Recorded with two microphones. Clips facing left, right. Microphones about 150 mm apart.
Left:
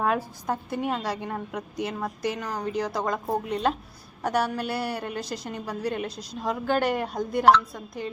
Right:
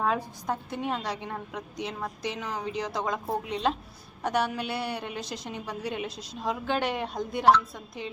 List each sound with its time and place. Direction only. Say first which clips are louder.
0.0 s a woman's voice: left 2 dB; 5° left (ahead or behind)